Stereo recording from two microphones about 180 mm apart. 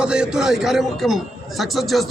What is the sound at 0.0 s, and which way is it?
A man's voice, 5° right (ahead or behind).